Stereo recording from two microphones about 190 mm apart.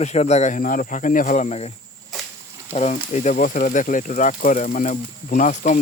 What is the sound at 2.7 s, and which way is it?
Speech, 35° left (ahead or behind).